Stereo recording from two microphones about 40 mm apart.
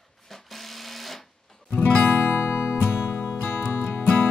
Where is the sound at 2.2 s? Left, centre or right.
Left.